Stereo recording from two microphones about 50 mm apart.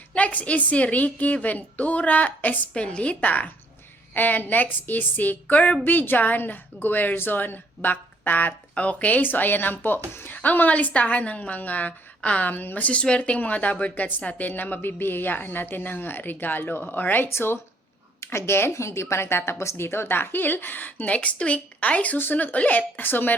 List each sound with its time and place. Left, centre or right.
0.1 s a woman's voice: left
8.7 s a woman's voice: left
17.3 s speech: left
18.7 s a woman's voice: left